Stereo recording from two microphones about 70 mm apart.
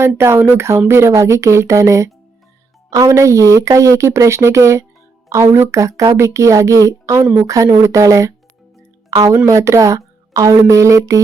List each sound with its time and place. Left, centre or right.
0.2 s a woman's voice: right